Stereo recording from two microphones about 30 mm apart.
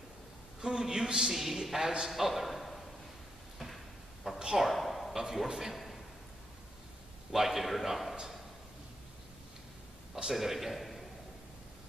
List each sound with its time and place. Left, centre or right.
0.6 s a man's voice: right
1.3 s a man's voice: centre
1.6 s a man's voice: centre
2.0 s a man's voice: centre
3.5 s a sound: centre
5.1 s a man's voice: centre
7.3 s a man's voice: centre
10.3 s a man's voice: centre